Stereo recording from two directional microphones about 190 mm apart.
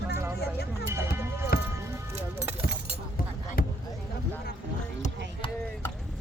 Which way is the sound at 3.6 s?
50° left (ahead or behind).